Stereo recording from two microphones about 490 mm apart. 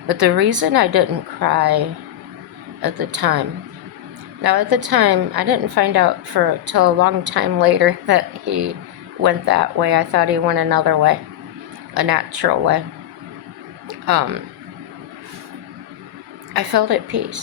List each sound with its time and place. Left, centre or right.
0.1 s a woman's voice: right
2.8 s a woman's voice: right
4.4 s a woman's voice: right
13.8 s a sound: right
16.6 s a woman's voice: right